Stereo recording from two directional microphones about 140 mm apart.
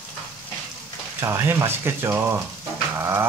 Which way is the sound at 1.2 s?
20° right (ahead or behind).